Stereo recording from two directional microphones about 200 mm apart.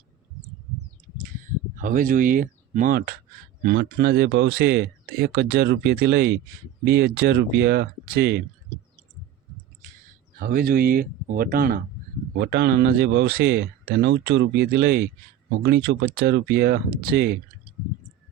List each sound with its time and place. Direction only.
1.7 s speech: 40° right (ahead or behind)
10.4 s speech: 45° right (ahead or behind)